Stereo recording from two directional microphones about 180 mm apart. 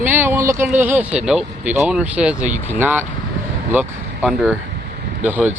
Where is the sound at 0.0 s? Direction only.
10° right (ahead or behind).